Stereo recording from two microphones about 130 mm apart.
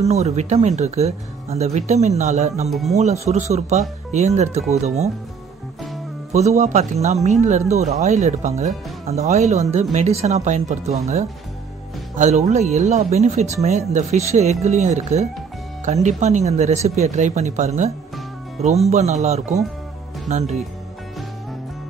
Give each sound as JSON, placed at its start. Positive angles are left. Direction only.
{"t": 0.0, "sound": "speech", "side_deg": -55}
{"t": 2.7, "sound": "speech", "side_deg": 0}
{"t": 3.0, "sound": "speech", "side_deg": -60}
{"t": 6.3, "sound": "speech", "side_deg": -60}